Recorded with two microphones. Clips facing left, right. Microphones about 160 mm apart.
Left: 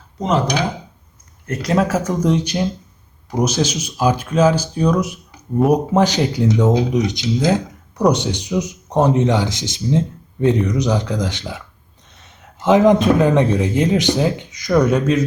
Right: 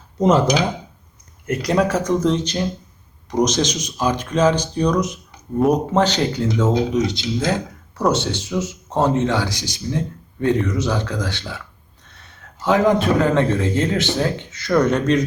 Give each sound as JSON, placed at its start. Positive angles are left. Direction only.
{"t": 1.5, "sound": "a man's voice", "side_deg": 0}